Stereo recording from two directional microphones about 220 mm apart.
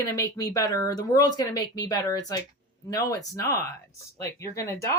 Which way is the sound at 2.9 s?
15° left (ahead or behind).